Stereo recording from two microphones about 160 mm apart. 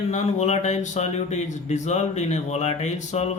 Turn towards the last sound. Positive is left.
turn(degrees=45)  # may be behind; listen again after turning